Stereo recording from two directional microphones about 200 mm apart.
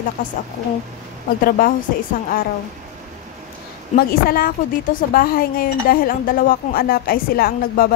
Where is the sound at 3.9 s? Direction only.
45° left (ahead or behind).